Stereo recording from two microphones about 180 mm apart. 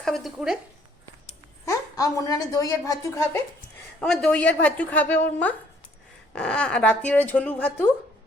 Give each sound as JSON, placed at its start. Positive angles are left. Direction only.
{"t": 0.0, "sound": "speech", "side_deg": 0}
{"t": 1.6, "sound": "a woman's voice", "side_deg": 20}
{"t": 4.0, "sound": "a woman's voice", "side_deg": 5}